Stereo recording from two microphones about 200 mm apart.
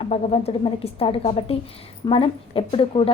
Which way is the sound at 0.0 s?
30° left (ahead or behind).